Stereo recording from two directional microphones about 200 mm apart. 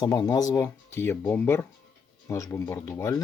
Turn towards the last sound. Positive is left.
turn(degrees=15)  # may be behind; listen again after turning